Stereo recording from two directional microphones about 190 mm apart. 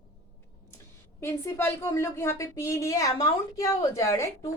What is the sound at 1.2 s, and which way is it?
A woman's voice, 10° left (ahead or behind).